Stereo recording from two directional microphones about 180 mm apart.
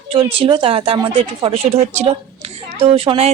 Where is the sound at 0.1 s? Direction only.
30° right (ahead or behind).